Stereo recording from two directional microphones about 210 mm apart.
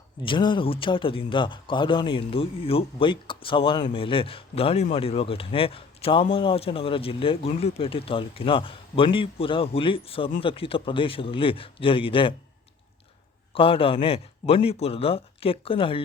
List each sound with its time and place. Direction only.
0.2 s speech: 25° left (ahead or behind)
13.5 s speech: 25° left (ahead or behind)